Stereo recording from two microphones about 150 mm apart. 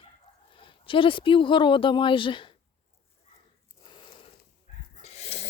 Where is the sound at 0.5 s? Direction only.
35° left (ahead or behind).